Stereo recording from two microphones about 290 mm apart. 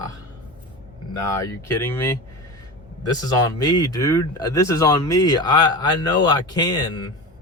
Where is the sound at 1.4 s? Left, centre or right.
Centre.